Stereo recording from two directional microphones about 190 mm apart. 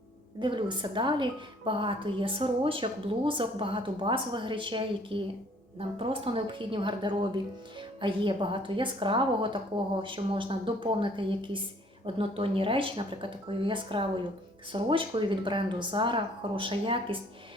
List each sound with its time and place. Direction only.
0.3 s a woman's voice: 25° right (ahead or behind)